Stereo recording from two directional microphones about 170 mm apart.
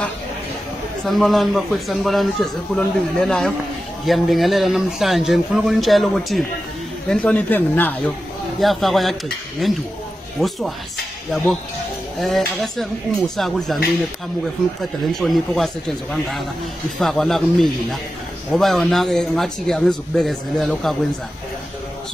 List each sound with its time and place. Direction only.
1.0 s speech: centre (ahead or behind)
12.2 s speech: centre (ahead or behind)
14.8 s speech: centre (ahead or behind)